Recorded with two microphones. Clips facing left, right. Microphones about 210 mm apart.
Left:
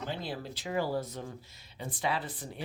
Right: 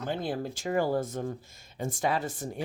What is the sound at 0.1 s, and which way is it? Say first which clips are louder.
Speech: right 6 dB; 50° right (ahead or behind).